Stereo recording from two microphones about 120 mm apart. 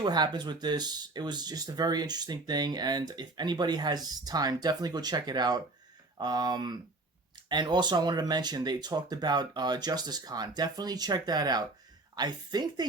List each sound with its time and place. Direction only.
0.0 s speech: 35° right (ahead or behind)